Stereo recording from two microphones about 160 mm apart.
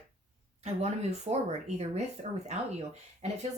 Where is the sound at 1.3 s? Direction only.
35° right (ahead or behind).